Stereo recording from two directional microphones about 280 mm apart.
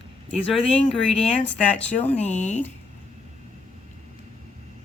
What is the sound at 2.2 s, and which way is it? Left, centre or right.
Speech, left.